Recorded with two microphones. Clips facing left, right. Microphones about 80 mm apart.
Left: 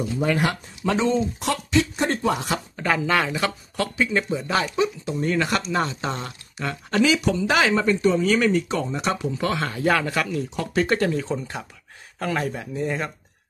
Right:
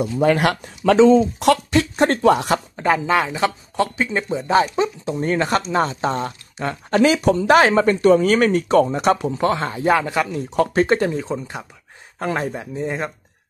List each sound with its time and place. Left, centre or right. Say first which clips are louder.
0.0 s speech: right 6 dB; right
1.7 s a sound: right 4 dB; right
2.7 s speech: right 2 dB; right
9.4 s speech: right 4 dB; right
10.5 s speech: right 7 dB; right
11.0 s speech: right 2 dB; centre